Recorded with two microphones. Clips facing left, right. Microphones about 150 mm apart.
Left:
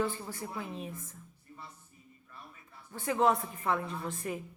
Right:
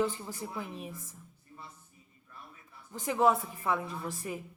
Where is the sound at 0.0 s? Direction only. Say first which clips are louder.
Right 2 dB; 15° right (ahead or behind).